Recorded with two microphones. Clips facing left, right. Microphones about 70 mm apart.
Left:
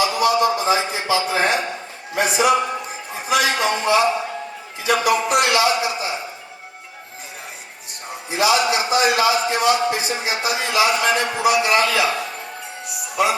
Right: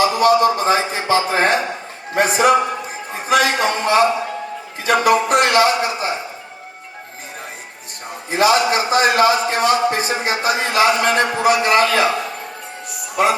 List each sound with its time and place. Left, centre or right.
0.0 s a man's voice: right
8.3 s a man's voice: right
13.2 s a man's voice: right